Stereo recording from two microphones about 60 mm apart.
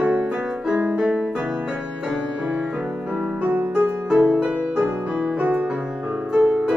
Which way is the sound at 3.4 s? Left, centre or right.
Right.